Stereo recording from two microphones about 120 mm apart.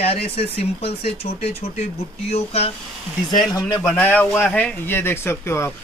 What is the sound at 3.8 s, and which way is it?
Speech, 10° left (ahead or behind).